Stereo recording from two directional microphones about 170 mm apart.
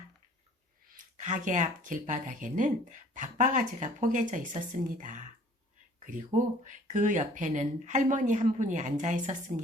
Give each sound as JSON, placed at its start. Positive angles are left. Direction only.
{"t": 0.9, "sound": "speech", "side_deg": -45}